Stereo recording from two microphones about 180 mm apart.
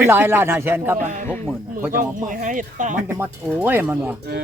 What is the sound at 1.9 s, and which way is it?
Speech, 45° right (ahead or behind).